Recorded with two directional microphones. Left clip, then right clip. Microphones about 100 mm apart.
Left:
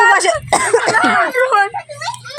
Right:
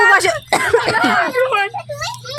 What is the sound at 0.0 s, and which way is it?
Throat clearing, 20° right (ahead or behind).